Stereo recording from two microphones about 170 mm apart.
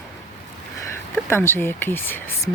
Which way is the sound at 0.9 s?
15° left (ahead or behind).